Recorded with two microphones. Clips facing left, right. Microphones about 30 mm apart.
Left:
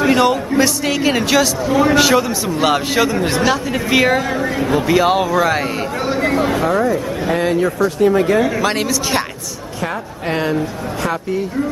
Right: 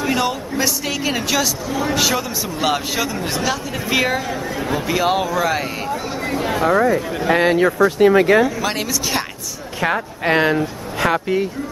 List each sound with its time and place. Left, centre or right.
0.0 s a man's voice: centre
6.0 s a sound: left
6.4 s speech: centre
6.7 s speech: centre
8.5 s a man's voice: centre
9.8 s speech: right